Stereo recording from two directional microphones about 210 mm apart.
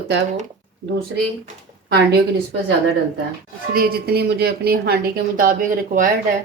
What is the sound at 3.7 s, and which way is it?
A woman's voice, 50° right (ahead or behind).